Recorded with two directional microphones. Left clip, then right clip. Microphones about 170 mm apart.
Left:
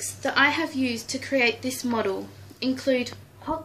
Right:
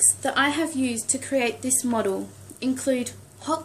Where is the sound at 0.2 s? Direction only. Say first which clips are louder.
Left 4 dB; 50° right (ahead or behind).